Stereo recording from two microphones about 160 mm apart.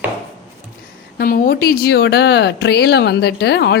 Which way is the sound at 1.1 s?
70° left (ahead or behind).